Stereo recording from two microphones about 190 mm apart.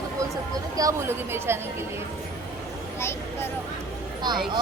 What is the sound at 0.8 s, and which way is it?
Speech, 15° right (ahead or behind).